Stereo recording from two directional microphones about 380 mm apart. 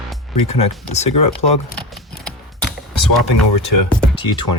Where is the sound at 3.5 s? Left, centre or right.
Left.